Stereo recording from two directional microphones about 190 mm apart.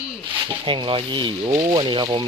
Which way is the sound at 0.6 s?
25° right (ahead or behind).